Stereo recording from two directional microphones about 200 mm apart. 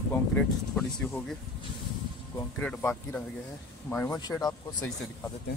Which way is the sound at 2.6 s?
10° left (ahead or behind).